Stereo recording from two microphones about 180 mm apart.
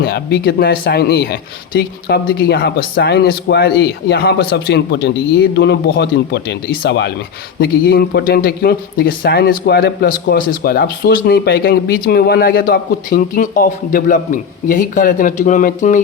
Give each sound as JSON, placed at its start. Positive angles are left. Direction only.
{"t": 0.0, "sound": "speech", "side_deg": 60}
{"t": 7.6, "sound": "speech", "side_deg": 55}